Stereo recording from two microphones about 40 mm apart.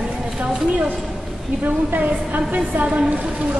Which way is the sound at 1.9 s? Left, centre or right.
Right.